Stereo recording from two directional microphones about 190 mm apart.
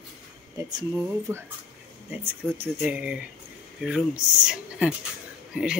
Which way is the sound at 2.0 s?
10° right (ahead or behind).